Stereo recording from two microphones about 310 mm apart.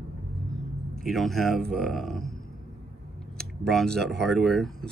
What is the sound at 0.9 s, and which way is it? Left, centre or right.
Speech, centre.